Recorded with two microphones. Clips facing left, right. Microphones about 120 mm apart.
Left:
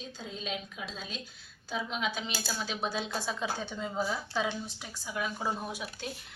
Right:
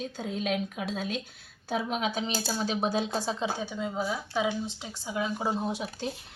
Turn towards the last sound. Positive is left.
turn(degrees=-35)  # may be behind; listen again after turning